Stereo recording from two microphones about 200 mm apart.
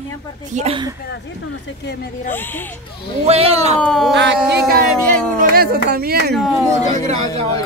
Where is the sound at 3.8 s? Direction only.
5° left (ahead or behind).